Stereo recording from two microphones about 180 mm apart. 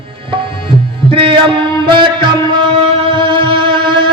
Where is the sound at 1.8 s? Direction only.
25° right (ahead or behind).